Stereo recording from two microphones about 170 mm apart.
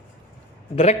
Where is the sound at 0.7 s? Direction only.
40° left (ahead or behind).